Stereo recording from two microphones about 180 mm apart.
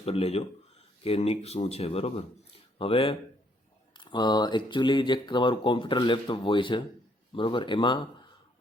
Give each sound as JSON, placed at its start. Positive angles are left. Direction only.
{"t": 0.0, "sound": "speech", "side_deg": 35}